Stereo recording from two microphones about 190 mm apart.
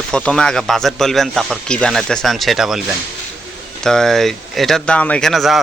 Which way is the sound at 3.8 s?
Centre (ahead or behind).